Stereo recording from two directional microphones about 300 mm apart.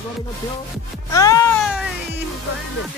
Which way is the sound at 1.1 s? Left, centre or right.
Centre.